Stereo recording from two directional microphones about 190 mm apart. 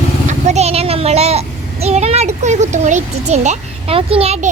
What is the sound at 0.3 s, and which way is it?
A child's voice, 35° right (ahead or behind).